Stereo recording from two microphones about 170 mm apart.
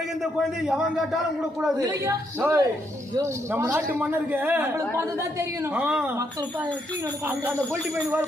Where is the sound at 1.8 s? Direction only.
20° right (ahead or behind).